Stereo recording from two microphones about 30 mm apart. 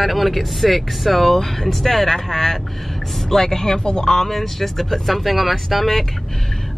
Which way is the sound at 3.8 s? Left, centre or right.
Left.